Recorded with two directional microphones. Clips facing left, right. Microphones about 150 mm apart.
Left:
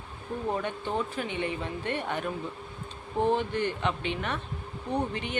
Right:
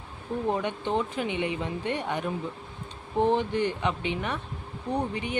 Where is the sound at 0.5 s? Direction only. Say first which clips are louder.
Right 2 dB; 20° right (ahead or behind).